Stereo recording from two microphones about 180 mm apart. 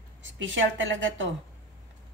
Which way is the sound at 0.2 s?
90° right.